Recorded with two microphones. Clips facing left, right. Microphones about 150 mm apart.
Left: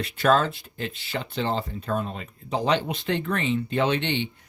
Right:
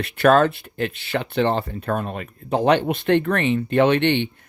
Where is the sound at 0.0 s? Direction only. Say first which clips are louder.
Right 6 dB; 65° right (ahead or behind).